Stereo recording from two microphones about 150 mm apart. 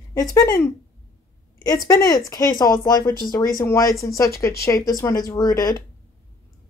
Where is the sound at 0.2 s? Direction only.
25° left (ahead or behind).